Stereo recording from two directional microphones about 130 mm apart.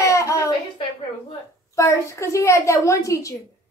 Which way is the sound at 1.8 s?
25° left (ahead or behind).